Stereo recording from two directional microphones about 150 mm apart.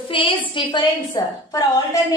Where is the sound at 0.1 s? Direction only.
35° left (ahead or behind).